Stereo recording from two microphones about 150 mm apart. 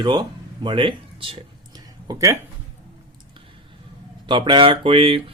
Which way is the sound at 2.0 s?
20° right (ahead or behind).